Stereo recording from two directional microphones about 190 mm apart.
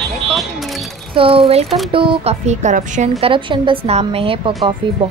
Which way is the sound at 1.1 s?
30° right (ahead or behind).